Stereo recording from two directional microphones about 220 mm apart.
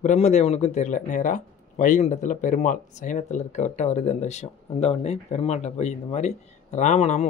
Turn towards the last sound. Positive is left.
turn(degrees=30)  # may be behind; listen again after turning